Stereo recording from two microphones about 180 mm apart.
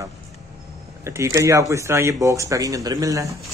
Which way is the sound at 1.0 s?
15° right (ahead or behind).